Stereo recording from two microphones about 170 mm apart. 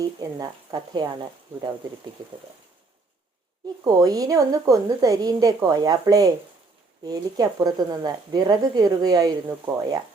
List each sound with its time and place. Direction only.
0.0 s speech: 20° right (ahead or behind)
3.8 s speech: 20° right (ahead or behind)